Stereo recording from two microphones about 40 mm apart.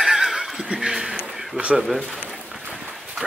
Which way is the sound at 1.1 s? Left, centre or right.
Right.